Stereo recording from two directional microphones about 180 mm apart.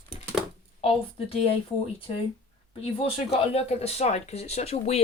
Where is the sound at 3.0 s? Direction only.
35° left (ahead or behind).